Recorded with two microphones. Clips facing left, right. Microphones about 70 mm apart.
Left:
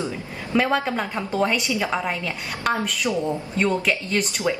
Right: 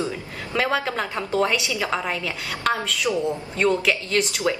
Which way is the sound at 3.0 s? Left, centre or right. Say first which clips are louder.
Right 2 dB; left.